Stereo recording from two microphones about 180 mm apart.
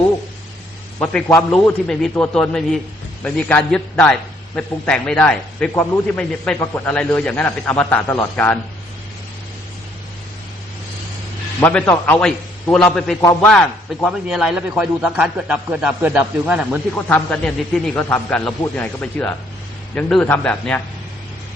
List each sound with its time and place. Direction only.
0.9 s a man's voice: 10° left (ahead or behind)
11.6 s a man's voice: 10° left (ahead or behind)
17.1 s a man's voice: 5° left (ahead or behind)